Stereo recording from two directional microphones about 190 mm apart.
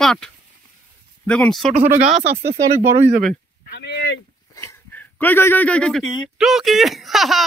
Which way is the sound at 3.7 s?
60° left (ahead or behind).